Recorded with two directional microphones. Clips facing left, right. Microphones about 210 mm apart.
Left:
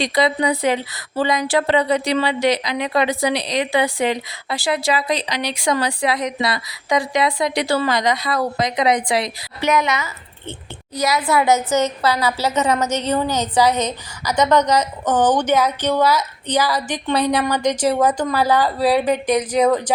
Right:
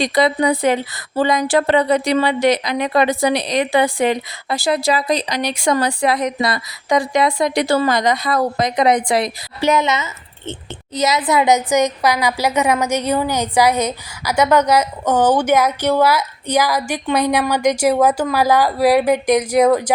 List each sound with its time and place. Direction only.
0.0 s speech: 50° right (ahead or behind)
9.6 s a woman's voice: 30° right (ahead or behind); by 19.9 s 10° right (ahead or behind)